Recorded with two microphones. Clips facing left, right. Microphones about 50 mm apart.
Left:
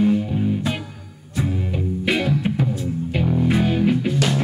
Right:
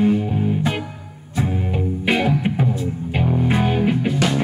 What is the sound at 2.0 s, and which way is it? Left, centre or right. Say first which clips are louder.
Music: right 2 dB; right.